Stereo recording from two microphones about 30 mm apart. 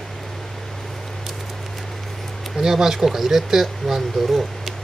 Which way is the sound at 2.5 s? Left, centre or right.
Centre.